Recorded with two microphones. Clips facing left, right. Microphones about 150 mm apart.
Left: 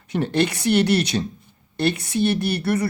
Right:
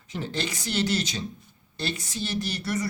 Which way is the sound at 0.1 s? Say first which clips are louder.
Left 10 dB; 65° left (ahead or behind).